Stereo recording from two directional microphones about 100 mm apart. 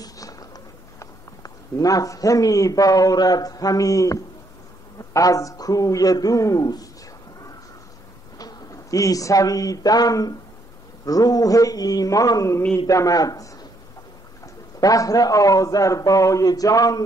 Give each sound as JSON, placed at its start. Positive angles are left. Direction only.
{"t": 0.0, "sound": "a sound", "side_deg": 35}
{"t": 0.9, "sound": "a man's voice", "side_deg": 35}
{"t": 8.4, "sound": "a man's voice", "side_deg": 35}